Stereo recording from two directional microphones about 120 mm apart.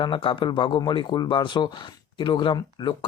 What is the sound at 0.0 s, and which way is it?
Speech, 40° left (ahead or behind).